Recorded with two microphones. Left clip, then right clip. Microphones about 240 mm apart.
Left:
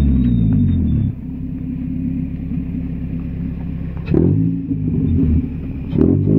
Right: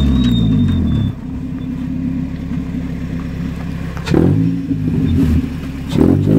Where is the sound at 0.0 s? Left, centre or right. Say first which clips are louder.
Right 3 dB; centre.